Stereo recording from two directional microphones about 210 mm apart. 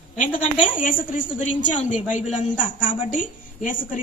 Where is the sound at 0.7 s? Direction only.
40° left (ahead or behind).